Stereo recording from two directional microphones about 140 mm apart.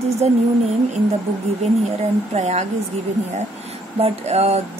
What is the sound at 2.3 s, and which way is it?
Speech, 55° right (ahead or behind).